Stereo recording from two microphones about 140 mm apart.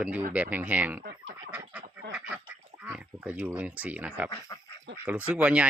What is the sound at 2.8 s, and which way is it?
Speech, 10° right (ahead or behind).